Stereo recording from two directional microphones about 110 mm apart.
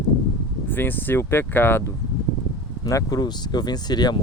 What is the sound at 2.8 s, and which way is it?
Speech, 30° left (ahead or behind).